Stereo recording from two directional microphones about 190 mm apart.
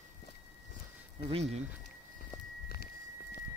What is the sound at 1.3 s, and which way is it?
Speech, 35° right (ahead or behind).